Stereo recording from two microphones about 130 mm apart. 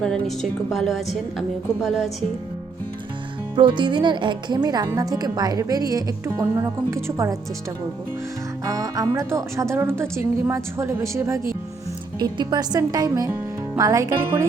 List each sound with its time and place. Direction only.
0.0 s a woman's voice: 5° left (ahead or behind)
3.5 s speech: 35° right (ahead or behind)
8.6 s speech: 25° right (ahead or behind)
12.2 s speech: 35° right (ahead or behind)